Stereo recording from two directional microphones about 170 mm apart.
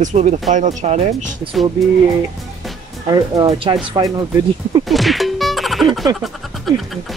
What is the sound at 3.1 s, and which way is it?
Speech, 25° right (ahead or behind).